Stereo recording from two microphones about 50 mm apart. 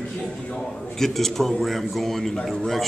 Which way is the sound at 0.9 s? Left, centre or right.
Centre.